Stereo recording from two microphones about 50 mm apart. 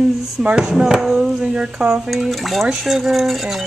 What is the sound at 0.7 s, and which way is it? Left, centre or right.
Speech, centre.